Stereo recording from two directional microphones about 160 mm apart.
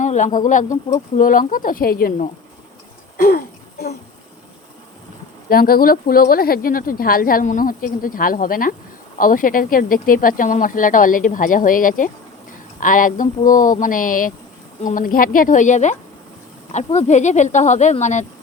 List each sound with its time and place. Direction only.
0.0 s bird: 50° left (ahead or behind)
0.3 s speech: 55° left (ahead or behind)
3.2 s a sound: 60° left (ahead or behind)
5.5 s speech: 65° left (ahead or behind); by 18.3 s 45° left (ahead or behind)